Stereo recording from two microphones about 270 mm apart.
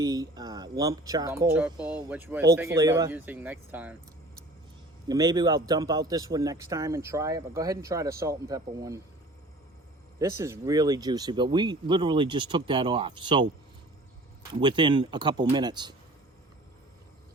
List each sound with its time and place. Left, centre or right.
0.0 s speech: centre
5.0 s speech: centre
10.2 s speech: centre
14.6 s speech: centre